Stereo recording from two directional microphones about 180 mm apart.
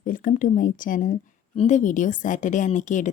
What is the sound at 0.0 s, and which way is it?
A woman's voice, 50° left (ahead or behind).